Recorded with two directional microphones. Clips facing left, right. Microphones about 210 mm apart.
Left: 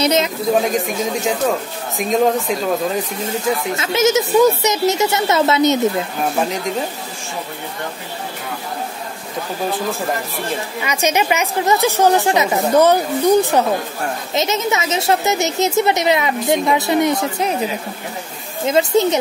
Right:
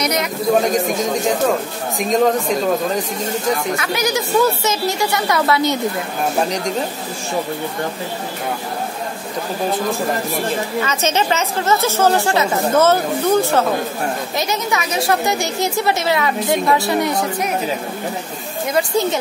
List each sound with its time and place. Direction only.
0.0 s speech: 25° left (ahead or behind)
0.6 s a man's voice: centre (ahead or behind)
3.7 s speech: 25° left (ahead or behind)
10.8 s a woman's voice: 15° left (ahead or behind)
18.7 s speech: 20° left (ahead or behind)